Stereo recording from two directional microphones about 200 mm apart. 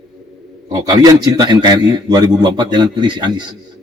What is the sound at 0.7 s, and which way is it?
A man's voice, 20° right (ahead or behind).